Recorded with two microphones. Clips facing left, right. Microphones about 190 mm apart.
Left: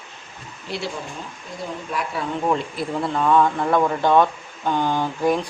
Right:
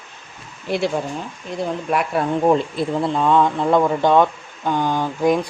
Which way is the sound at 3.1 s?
15° right (ahead or behind).